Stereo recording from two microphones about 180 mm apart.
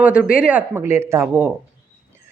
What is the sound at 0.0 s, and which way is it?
Speech, 5° right (ahead or behind).